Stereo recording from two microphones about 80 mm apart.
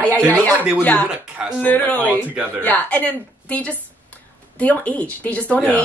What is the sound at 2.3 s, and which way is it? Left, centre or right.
Speech, centre.